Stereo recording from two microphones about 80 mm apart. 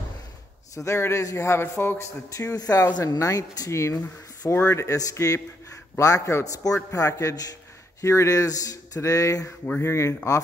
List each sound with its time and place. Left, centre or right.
0.7 s a man's voice: left
2.5 s a man's voice: left